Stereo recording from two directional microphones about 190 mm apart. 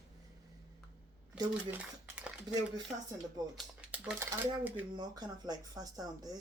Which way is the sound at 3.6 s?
5° right (ahead or behind).